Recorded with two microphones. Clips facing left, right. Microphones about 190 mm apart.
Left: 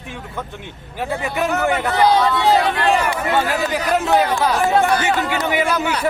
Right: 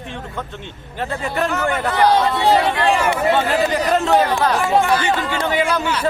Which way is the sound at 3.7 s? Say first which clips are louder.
Left 1 dB; 5° left (ahead or behind).